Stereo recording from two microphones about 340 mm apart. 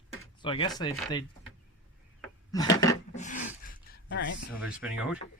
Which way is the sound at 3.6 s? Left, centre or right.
Left.